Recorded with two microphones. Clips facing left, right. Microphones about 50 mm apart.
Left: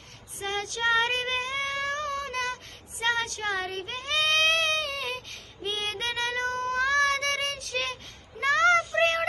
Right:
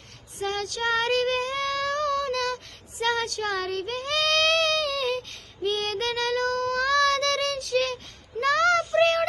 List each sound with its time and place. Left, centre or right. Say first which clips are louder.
0.3 s female singing: right 2 dB; left
3.0 s child singing: right 2 dB; left
8.4 s a sound: right 1 dB; left
9.0 s child singing: right 4 dB; left